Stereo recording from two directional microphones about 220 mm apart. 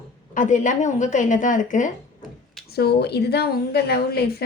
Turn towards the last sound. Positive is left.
turn(degrees=45)  # may be behind; listen again after turning